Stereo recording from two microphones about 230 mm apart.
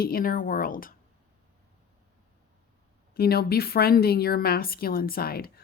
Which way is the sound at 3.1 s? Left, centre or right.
Left.